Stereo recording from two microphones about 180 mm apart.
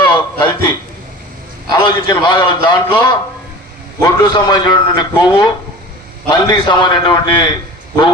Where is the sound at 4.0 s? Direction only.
25° left (ahead or behind).